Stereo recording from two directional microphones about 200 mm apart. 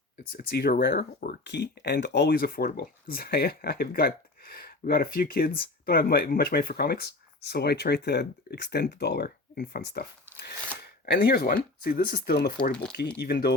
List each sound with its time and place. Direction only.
0.3 s speech: 50° left (ahead or behind)